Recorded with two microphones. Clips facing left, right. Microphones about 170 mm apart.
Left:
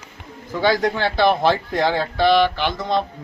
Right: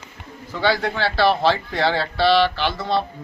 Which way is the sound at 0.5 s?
10° left (ahead or behind).